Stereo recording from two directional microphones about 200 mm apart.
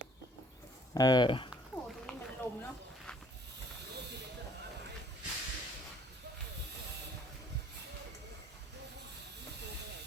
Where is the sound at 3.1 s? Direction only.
5° left (ahead or behind).